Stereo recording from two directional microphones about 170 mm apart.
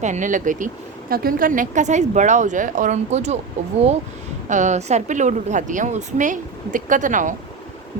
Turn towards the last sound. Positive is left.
turn(degrees=-50)  # may be behind; listen again after turning